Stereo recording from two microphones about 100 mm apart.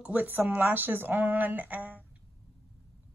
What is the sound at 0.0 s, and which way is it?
Speech, 15° right (ahead or behind).